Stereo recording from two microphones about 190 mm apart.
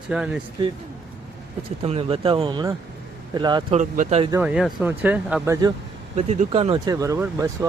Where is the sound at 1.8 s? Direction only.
30° right (ahead or behind).